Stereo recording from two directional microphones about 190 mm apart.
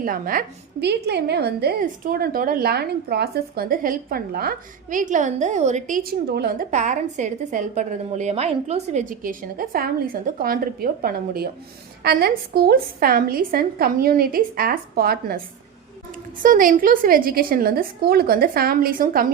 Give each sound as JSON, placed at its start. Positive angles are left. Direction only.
{"t": 0.0, "sound": "a woman's voice", "side_deg": -45}
{"t": 16.4, "sound": "a woman's voice", "side_deg": -45}